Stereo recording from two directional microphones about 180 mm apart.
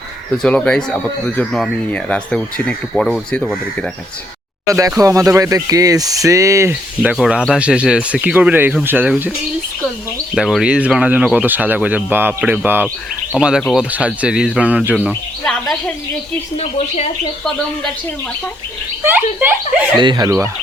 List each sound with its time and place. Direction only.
0.4 s speech: 5° left (ahead or behind)
4.6 s speech: 20° right (ahead or behind)
10.3 s speech: 5° right (ahead or behind)
16.6 s speech: 35° left (ahead or behind)
19.0 s speech: 10° right (ahead or behind)
20.0 s speech: 25° right (ahead or behind)